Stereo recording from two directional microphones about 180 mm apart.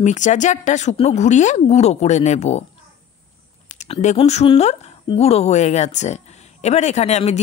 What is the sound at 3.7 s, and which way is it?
Speech, 40° left (ahead or behind).